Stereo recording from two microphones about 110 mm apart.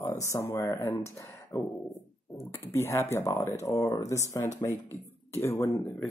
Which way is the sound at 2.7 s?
25° left (ahead or behind).